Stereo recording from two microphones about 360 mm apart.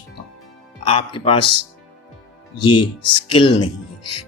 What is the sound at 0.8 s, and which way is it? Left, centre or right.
Speech, centre.